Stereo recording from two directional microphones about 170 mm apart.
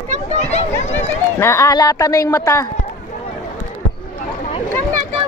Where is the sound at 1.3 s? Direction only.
15° left (ahead or behind).